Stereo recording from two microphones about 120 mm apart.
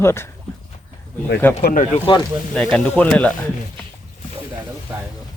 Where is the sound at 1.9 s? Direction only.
45° left (ahead or behind).